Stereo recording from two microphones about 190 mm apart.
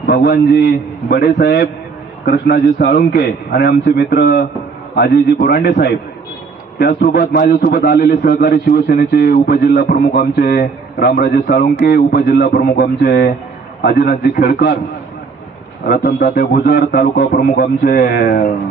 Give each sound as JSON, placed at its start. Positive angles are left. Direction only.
{"t": 0.0, "sound": "a man's voice", "side_deg": 55}
{"t": 15.9, "sound": "a man's voice", "side_deg": 50}